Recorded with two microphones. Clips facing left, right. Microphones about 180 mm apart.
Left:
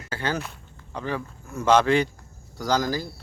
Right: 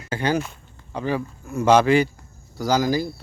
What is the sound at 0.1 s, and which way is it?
Speech, 15° right (ahead or behind).